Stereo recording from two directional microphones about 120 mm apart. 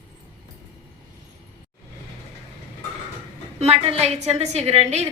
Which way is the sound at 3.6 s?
60° right (ahead or behind).